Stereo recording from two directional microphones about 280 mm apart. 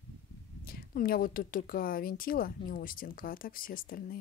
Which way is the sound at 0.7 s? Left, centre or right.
Left.